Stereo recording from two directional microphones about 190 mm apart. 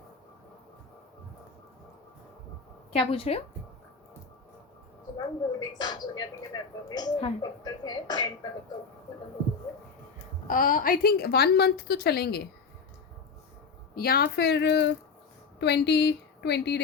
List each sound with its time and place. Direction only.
2.9 s a woman's voice: 30° left (ahead or behind)
5.1 s a woman's voice: 20° left (ahead or behind)
10.4 s a woman's voice: 45° left (ahead or behind)
13.9 s a woman's voice: 55° left (ahead or behind)